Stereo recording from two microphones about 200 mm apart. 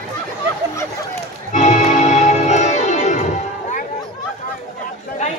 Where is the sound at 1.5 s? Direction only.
35° left (ahead or behind).